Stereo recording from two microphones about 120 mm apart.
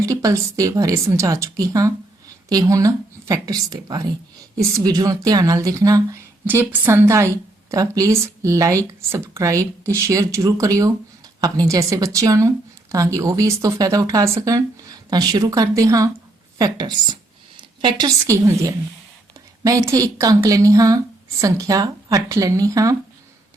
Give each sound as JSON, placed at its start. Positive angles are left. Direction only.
{"t": 0.0, "sound": "speech", "side_deg": -30}
{"t": 6.4, "sound": "a woman's voice", "side_deg": -15}